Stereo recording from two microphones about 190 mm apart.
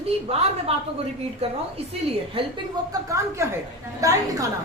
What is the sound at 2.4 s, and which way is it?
Speech, 30° right (ahead or behind).